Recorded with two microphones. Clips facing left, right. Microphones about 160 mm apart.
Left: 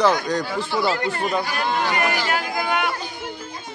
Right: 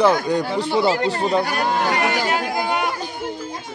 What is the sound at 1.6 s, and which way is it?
Speech, 40° right (ahead or behind).